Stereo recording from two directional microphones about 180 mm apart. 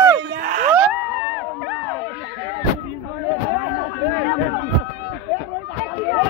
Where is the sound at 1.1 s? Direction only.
10° right (ahead or behind).